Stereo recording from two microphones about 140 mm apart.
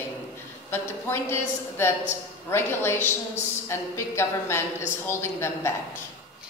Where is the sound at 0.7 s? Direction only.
15° left (ahead or behind).